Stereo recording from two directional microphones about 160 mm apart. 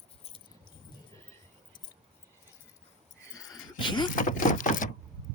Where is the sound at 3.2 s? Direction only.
20° left (ahead or behind).